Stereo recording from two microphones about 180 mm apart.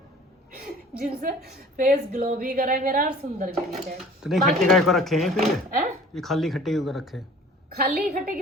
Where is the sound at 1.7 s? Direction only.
45° right (ahead or behind).